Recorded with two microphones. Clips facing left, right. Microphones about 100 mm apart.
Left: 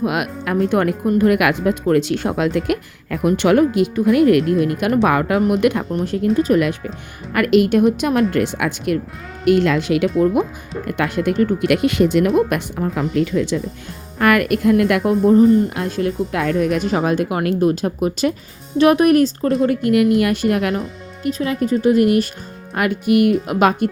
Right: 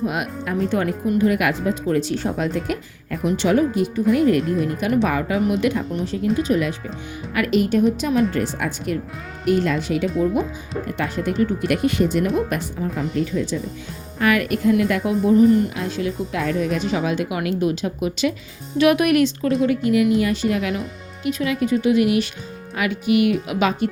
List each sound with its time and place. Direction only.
0.0 s speech: 80° left
0.5 s a woman's voice: 55° left (ahead or behind); by 3.2 s 80° left
3.2 s a woman's voice: 60° left (ahead or behind)
6.3 s speech: 40° left (ahead or behind)
7.3 s a woman's voice: 65° left (ahead or behind)
8.3 s speech: 85° left
10.1 s speech: centre (ahead or behind)
10.8 s speech: 65° left (ahead or behind)
12.5 s speech: 70° left (ahead or behind)
14.2 s a woman's voice: 55° left (ahead or behind)
15.2 s speech: 35° left (ahead or behind)
15.7 s speech: 50° left (ahead or behind)
19.6 s a woman's voice: 55° left (ahead or behind)
21.2 s speech: 35° left (ahead or behind); by 23.9 s 50° left (ahead or behind)